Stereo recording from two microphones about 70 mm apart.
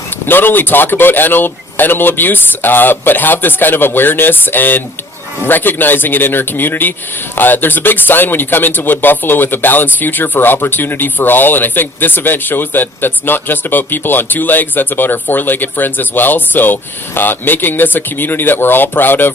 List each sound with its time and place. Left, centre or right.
0.3 s speech: left